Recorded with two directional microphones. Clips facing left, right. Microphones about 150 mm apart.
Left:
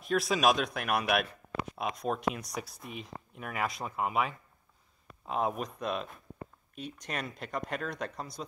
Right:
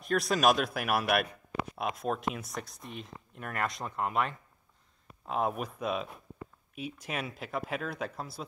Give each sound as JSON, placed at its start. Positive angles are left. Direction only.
{"t": 0.0, "sound": "a man's voice", "side_deg": 0}